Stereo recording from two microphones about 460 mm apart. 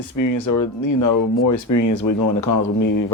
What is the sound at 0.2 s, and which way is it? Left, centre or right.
Speech, left.